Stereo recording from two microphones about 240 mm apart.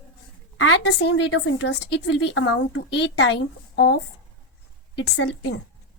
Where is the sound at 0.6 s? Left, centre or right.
Left.